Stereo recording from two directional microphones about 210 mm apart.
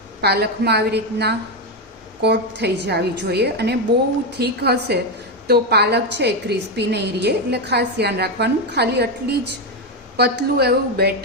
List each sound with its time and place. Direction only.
0.2 s a woman's voice: 50° right (ahead or behind)
10.2 s a woman's voice: 50° right (ahead or behind)